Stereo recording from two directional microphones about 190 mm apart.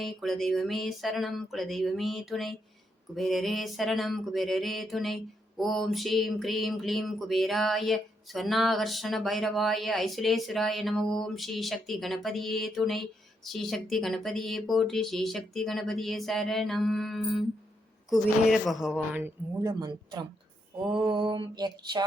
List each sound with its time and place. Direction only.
0.0 s mantra: centre (ahead or behind)
19.2 s mantra: 20° right (ahead or behind)